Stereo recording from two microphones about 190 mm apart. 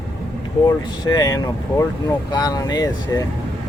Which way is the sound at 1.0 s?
20° left (ahead or behind).